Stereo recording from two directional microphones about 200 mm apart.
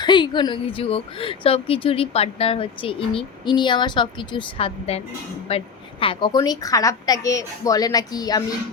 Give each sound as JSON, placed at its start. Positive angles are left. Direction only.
{"t": 0.0, "sound": "speech", "side_deg": 20}